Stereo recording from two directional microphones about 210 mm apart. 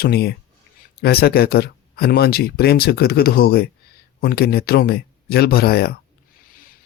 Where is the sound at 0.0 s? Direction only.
50° left (ahead or behind).